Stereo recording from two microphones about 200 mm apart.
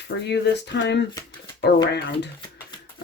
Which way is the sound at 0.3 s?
60° left (ahead or behind).